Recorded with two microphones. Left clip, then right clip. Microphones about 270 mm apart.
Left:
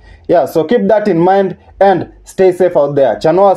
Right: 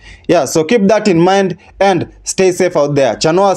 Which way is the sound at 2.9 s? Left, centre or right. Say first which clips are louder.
Left 2 dB; right.